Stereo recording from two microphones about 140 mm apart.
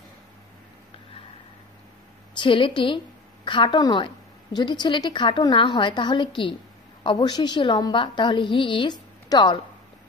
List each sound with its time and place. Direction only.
2.3 s a woman's voice: 40° left (ahead or behind)